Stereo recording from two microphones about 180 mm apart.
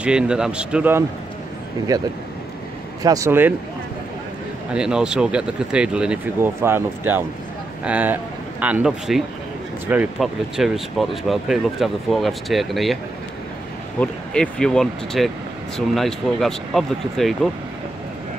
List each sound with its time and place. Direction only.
0.0 s speech: 5° right (ahead or behind)
1.9 s speech: 20° right (ahead or behind)
4.7 s speech: 5° right (ahead or behind)